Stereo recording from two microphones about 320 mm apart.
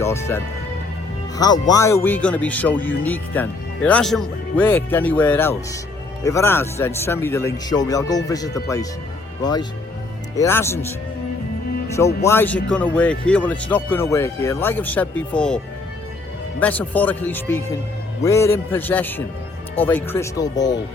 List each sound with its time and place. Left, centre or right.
0.0 s speech: centre
11.9 s speech: centre